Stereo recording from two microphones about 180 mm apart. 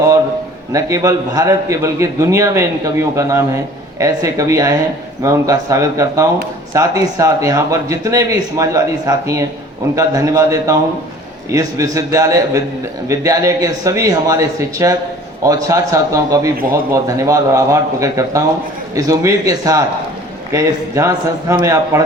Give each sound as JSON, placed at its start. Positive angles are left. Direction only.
{"t": 0.7, "sound": "a man's voice", "side_deg": -20}
{"t": 16.6, "sound": "a man's voice", "side_deg": -55}
{"t": 16.9, "sound": "a man's voice", "side_deg": -15}